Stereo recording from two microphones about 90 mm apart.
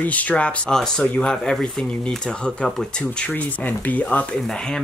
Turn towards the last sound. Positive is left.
turn(degrees=15)  # may be behind; listen again after turning